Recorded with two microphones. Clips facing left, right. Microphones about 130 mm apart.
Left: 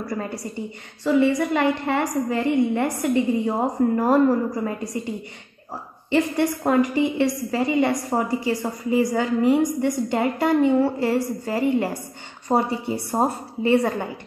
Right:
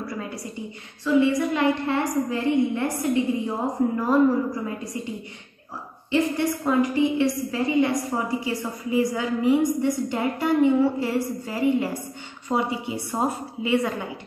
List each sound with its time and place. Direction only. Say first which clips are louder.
1.0 s a woman's voice: left 1 dB; 55° left (ahead or behind)
6.6 s a woman's voice: left 1 dB; 60° left (ahead or behind)